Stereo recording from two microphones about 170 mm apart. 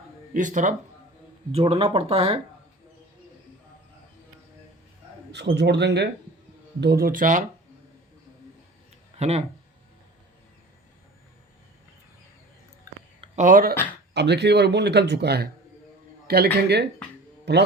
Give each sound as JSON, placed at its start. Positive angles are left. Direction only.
{"t": 0.3, "sound": "speech", "side_deg": -45}
{"t": 1.5, "sound": "speech", "side_deg": -35}
{"t": 5.3, "sound": "speech", "side_deg": -80}
{"t": 6.7, "sound": "speech", "side_deg": -70}
{"t": 9.1, "sound": "speech", "side_deg": -40}
{"t": 13.2, "sound": "speech", "side_deg": -45}
{"t": 14.1, "sound": "speech", "side_deg": -85}
{"t": 17.5, "sound": "speech", "side_deg": -80}